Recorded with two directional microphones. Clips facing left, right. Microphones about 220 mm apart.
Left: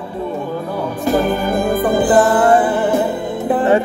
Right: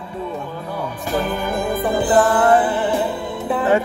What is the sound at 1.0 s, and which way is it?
Music, 45° left (ahead or behind).